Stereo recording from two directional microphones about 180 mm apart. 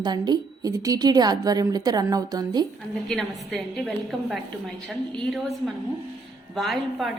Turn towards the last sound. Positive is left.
turn(degrees=0)  # may be behind; listen again after turning